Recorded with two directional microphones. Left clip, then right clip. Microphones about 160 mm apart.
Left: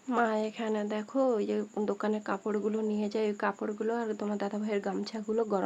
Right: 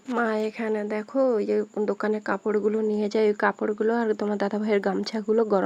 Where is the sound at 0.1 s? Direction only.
30° right (ahead or behind).